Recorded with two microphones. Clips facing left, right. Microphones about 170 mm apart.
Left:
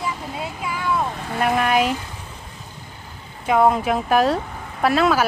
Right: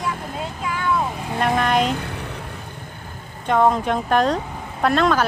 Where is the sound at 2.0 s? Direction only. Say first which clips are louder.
Right 6 dB; 65° right (ahead or behind).